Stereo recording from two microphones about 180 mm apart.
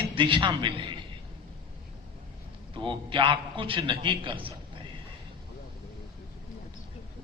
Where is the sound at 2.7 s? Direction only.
25° right (ahead or behind).